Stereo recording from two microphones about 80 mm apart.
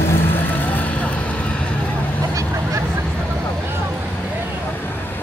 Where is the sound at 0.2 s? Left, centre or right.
Left.